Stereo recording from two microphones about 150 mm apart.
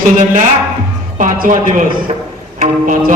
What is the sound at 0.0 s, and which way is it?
A man's voice, 60° right (ahead or behind).